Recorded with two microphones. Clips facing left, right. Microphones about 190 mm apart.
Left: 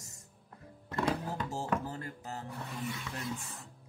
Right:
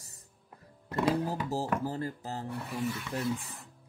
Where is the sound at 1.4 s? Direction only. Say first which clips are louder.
Right 3 dB; 35° right (ahead or behind).